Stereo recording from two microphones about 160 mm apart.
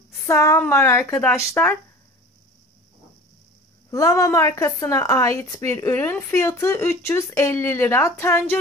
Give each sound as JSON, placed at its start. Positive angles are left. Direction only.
{"t": 0.3, "sound": "speech", "side_deg": 20}
{"t": 3.9, "sound": "a woman's voice", "side_deg": 20}